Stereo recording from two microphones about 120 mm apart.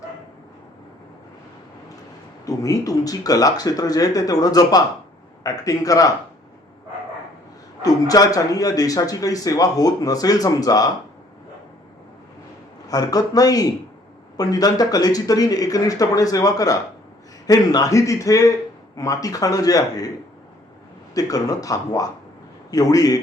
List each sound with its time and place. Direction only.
2.5 s a man's voice: 30° left (ahead or behind)
7.8 s a man's voice: 30° left (ahead or behind)
12.9 s a man's voice: 30° left (ahead or behind)
21.2 s a man's voice: 30° left (ahead or behind)